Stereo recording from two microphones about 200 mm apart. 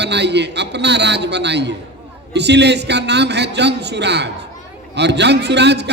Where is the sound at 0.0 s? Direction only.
60° right (ahead or behind).